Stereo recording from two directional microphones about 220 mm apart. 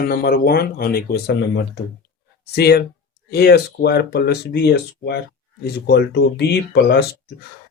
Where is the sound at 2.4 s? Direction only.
45° left (ahead or behind).